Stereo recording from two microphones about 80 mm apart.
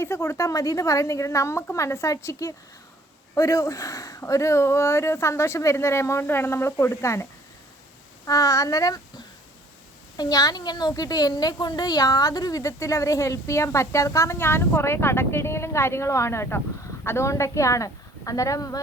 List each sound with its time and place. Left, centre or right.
0.0 s speech: left
8.3 s a woman's voice: left
10.2 s a woman's voice: left
14.3 s speech: left